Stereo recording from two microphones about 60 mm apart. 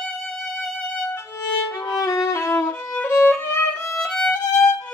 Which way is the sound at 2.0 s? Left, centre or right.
Left.